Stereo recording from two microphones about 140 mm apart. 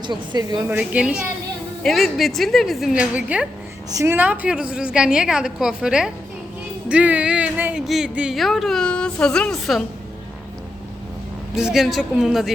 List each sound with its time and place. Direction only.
0.1 s speech: 30° right (ahead or behind)
0.7 s a woman's voice: 10° right (ahead or behind)
11.5 s speech: centre (ahead or behind)